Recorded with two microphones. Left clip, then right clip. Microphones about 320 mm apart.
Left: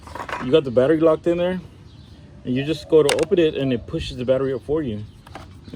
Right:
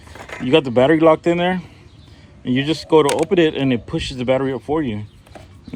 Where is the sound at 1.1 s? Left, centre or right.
Right.